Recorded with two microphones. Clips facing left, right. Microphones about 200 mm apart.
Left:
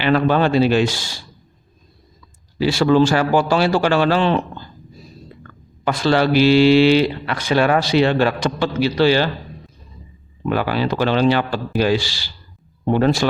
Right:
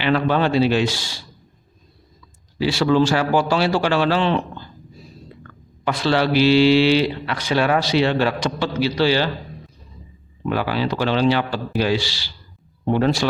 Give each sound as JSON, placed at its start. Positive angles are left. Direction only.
{"t": 0.0, "sound": "speech", "side_deg": 45}
{"t": 2.6, "sound": "speech", "side_deg": 50}
{"t": 5.8, "sound": "speech", "side_deg": 45}
{"t": 10.5, "sound": "speech", "side_deg": 50}